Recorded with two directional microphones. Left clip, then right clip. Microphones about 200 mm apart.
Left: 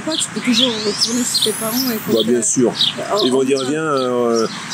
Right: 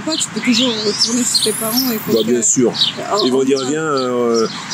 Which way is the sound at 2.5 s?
5° left (ahead or behind).